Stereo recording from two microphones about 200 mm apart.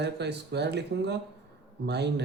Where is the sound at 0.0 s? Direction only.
55° right (ahead or behind).